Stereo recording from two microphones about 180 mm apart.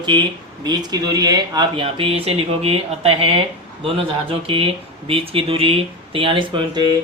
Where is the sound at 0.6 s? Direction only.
20° right (ahead or behind).